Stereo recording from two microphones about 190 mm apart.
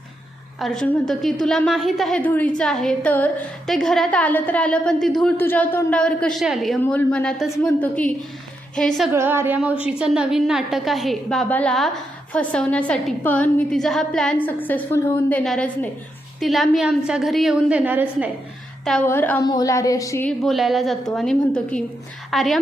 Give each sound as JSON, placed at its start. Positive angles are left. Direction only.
{"t": 0.6, "sound": "a woman's voice", "side_deg": 5}
{"t": 9.1, "sound": "a woman's voice", "side_deg": -10}
{"t": 19.0, "sound": "a woman's voice", "side_deg": 10}
{"t": 20.4, "sound": "a woman's voice", "side_deg": 0}